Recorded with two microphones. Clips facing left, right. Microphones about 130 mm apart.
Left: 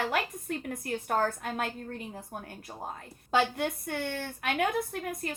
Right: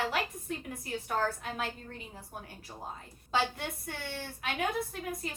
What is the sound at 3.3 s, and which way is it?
A woman's voice, 55° left (ahead or behind).